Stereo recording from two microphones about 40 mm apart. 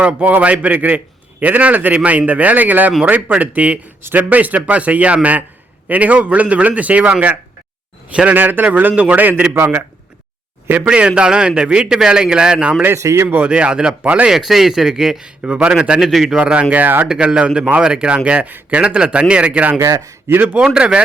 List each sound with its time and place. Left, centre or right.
0.0 s a man's voice: right
9.5 s a man's voice: right
10.8 s a man's voice: right
14.3 s speech: centre
15.4 s a man's voice: right
16.0 s speech: centre
16.4 s a man's voice: right
16.7 s a man's voice: right
17.1 s a man's voice: right
18.9 s a man's voice: right
20.3 s a man's voice: right
20.7 s a man's voice: right